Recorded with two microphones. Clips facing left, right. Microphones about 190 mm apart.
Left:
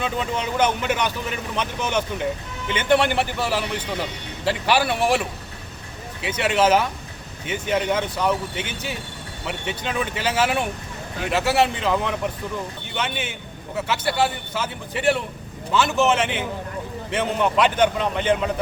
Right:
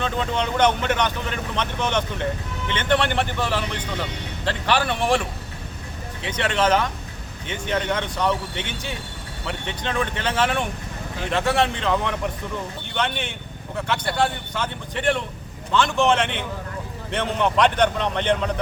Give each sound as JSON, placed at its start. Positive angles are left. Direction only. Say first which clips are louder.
{"t": 0.0, "sound": "speech", "louder": "right 1 dB", "side_deg": 5}
{"t": 6.2, "sound": "a man's voice", "louder": "left 2 dB", "side_deg": 10}